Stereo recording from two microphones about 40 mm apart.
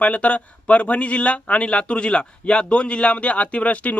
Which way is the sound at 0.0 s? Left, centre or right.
Left.